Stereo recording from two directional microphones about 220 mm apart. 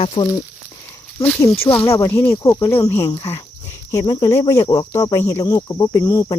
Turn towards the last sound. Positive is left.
turn(degrees=15)  # may be behind; listen again after turning